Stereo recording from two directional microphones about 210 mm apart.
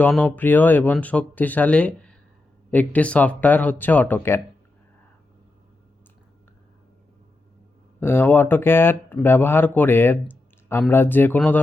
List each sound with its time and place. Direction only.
0.0 s speech: 5° left (ahead or behind)
8.0 s speech: 10° left (ahead or behind)